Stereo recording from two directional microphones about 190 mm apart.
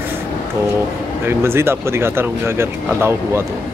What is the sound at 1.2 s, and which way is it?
Speech, 10° right (ahead or behind).